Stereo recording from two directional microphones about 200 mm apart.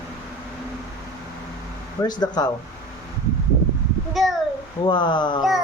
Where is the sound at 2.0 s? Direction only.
20° left (ahead or behind).